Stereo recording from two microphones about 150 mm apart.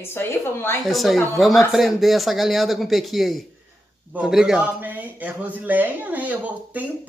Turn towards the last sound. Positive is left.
turn(degrees=-10)  # may be behind; listen again after turning